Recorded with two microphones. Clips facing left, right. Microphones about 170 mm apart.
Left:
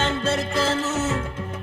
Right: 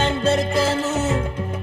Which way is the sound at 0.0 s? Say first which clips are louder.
Right 4 dB; 15° right (ahead or behind).